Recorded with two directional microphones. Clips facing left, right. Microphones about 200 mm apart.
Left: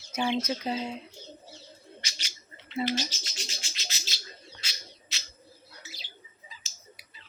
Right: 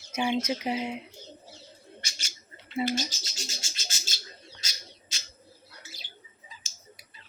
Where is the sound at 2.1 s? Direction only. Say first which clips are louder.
Even; 50° right (ahead or behind).